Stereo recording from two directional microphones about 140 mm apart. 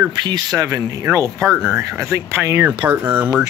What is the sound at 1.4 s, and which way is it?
Speech, centre (ahead or behind).